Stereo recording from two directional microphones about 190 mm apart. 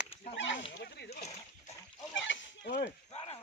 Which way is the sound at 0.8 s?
60° left (ahead or behind).